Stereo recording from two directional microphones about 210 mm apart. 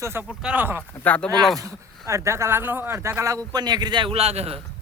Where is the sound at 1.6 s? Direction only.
15° right (ahead or behind); by 4.6 s 30° right (ahead or behind).